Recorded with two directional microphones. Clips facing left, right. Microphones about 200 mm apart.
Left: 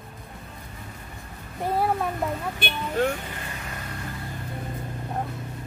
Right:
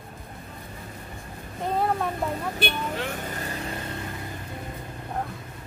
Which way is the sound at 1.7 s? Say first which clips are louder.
Left 1 dB; 5° left (ahead or behind).